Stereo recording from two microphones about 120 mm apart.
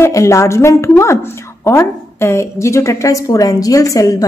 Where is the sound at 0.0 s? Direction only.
25° left (ahead or behind).